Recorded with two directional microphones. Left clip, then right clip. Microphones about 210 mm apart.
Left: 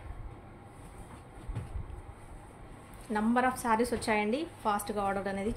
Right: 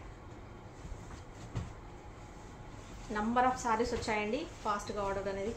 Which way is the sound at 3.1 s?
55° left (ahead or behind).